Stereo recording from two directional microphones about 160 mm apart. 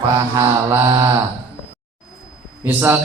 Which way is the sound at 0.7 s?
25° right (ahead or behind).